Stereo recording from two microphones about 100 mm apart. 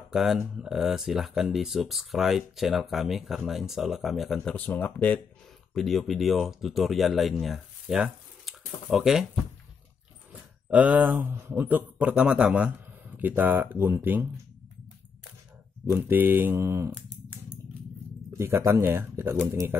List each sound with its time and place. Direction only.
0.1 s speech: 5° right (ahead or behind)
4.6 s speech: 15° left (ahead or behind)
5.8 s speech: centre (ahead or behind); by 14.4 s 20° right (ahead or behind)
15.9 s speech: 20° right (ahead or behind)
18.4 s speech: 30° right (ahead or behind)